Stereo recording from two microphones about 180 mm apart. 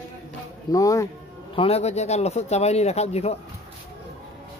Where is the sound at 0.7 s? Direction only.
20° left (ahead or behind).